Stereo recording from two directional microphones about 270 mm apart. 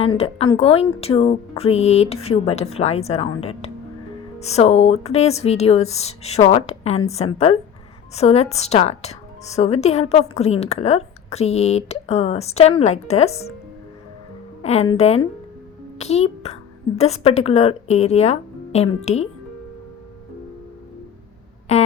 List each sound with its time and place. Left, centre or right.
0.2 s a woman's voice: left
14.6 s a woman's voice: left
21.7 s a sound: left